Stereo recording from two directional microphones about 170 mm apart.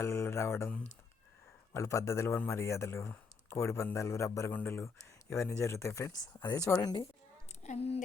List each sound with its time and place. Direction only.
0.0 s speech: 15° left (ahead or behind)
7.6 s a woman's voice: 40° left (ahead or behind)